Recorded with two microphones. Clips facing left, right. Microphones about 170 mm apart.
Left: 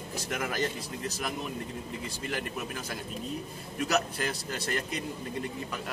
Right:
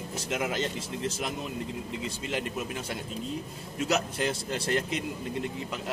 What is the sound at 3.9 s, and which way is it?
Speech, 25° right (ahead or behind).